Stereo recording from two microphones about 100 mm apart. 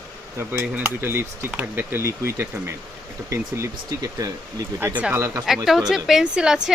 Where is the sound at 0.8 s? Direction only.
25° right (ahead or behind).